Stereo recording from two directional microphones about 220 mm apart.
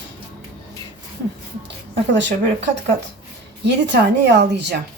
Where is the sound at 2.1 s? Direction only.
55° right (ahead or behind).